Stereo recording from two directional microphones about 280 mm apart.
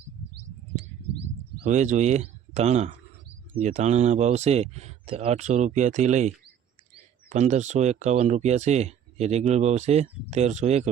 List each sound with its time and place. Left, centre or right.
1.6 s speech: right
7.3 s speech: right